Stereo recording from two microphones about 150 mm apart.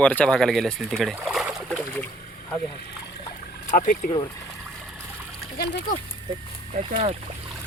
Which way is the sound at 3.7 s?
60° left (ahead or behind).